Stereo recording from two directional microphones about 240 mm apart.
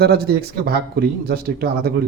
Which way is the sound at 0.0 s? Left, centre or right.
Right.